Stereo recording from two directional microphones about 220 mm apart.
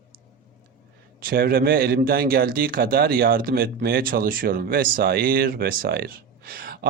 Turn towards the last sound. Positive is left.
turn(degrees=-40)  # may be behind; listen again after turning